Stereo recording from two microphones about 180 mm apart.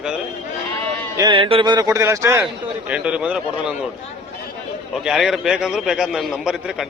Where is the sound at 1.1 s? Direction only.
25° right (ahead or behind); by 3.8 s 5° right (ahead or behind).